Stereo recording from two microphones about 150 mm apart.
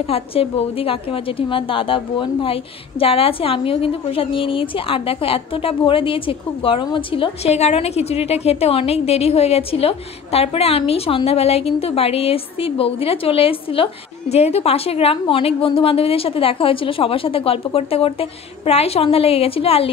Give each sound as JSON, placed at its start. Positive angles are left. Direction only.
{"t": 0.1, "sound": "a woman's voice", "side_deg": 40}